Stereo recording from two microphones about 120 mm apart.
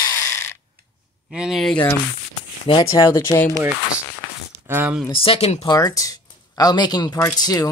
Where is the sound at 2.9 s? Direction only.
25° left (ahead or behind).